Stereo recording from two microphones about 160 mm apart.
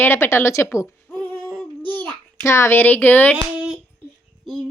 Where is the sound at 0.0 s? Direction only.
15° left (ahead or behind).